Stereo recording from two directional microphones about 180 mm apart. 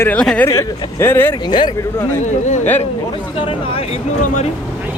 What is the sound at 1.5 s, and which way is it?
Speech, 25° left (ahead or behind).